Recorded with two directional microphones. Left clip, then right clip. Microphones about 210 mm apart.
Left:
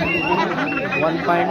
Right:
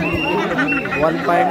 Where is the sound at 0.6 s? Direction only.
10° right (ahead or behind).